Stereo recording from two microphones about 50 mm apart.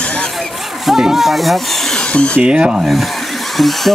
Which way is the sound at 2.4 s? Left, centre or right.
Centre.